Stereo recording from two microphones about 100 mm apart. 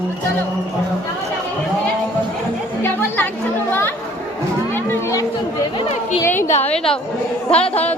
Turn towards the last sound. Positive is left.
turn(degrees=15)  # may be behind; listen again after turning